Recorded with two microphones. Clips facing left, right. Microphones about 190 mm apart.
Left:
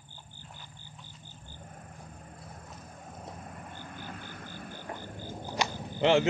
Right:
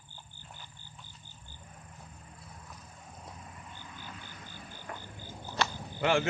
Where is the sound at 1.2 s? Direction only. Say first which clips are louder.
Left 5 dB; 50° left (ahead or behind).